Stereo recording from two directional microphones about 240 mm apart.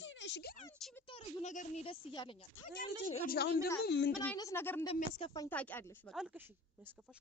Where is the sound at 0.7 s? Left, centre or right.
Centre.